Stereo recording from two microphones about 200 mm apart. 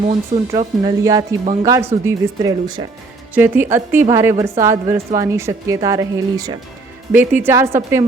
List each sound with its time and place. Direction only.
0.1 s a woman's voice: 25° right (ahead or behind)